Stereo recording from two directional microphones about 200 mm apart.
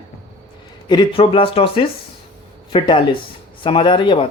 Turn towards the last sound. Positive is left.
turn(degrees=25)  # may be behind; listen again after turning